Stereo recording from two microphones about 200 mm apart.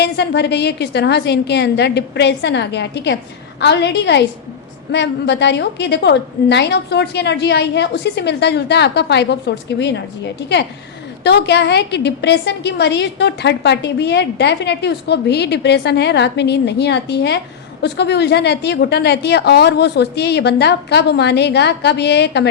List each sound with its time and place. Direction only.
0.0 s a woman's voice: 55° left (ahead or behind)
11.2 s a woman's voice: 55° left (ahead or behind)